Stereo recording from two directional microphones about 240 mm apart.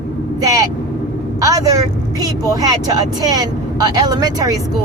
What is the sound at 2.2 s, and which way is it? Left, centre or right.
Speech, centre.